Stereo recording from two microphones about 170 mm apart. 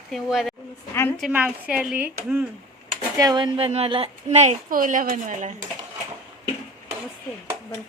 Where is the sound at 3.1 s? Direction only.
25° right (ahead or behind).